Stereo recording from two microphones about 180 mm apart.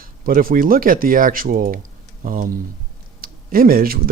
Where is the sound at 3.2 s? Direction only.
55° right (ahead or behind).